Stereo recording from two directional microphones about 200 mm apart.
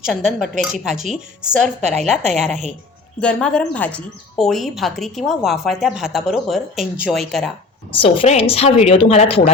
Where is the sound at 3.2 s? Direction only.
5° left (ahead or behind).